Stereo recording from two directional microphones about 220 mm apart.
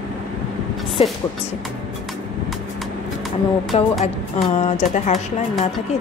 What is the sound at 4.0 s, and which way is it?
A woman's voice, 30° left (ahead or behind).